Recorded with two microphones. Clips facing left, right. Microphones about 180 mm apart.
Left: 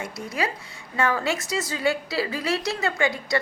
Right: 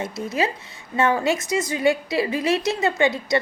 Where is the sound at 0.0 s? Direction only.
25° right (ahead or behind).